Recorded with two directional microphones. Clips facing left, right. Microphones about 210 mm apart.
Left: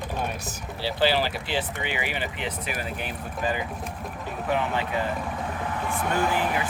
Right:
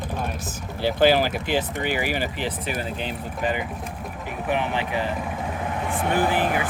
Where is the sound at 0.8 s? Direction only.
50° right (ahead or behind); by 5.1 s 20° right (ahead or behind).